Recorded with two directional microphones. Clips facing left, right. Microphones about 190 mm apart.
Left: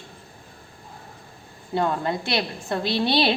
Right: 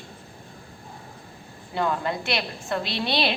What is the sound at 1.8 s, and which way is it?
A woman's voice, 30° left (ahead or behind).